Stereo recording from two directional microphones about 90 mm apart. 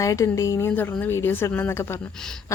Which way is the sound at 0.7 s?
20° left (ahead or behind).